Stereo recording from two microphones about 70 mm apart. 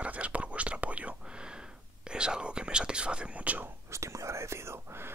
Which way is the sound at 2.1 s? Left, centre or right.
Centre.